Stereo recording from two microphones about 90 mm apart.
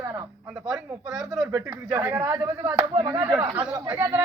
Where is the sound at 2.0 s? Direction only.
25° right (ahead or behind).